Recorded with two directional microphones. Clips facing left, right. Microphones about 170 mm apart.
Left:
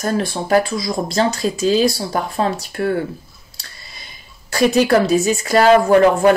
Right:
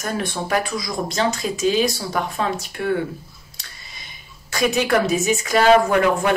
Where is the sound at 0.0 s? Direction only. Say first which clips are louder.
Left 5 dB; 30° left (ahead or behind).